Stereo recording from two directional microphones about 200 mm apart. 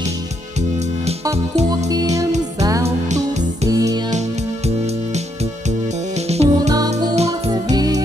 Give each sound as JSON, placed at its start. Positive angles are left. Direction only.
{"t": 2.6, "sound": "music", "side_deg": -15}
{"t": 3.1, "sound": "music", "side_deg": -35}
{"t": 3.6, "sound": "music", "side_deg": -15}
{"t": 4.6, "sound": "music", "side_deg": -35}
{"t": 6.7, "sound": "music", "side_deg": -20}
{"t": 7.2, "sound": "music", "side_deg": -30}
{"t": 7.7, "sound": "music", "side_deg": -20}